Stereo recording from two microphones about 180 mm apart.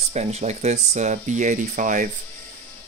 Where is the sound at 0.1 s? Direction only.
40° right (ahead or behind).